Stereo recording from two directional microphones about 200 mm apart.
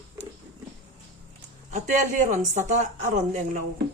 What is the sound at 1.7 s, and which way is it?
Speech, 35° right (ahead or behind).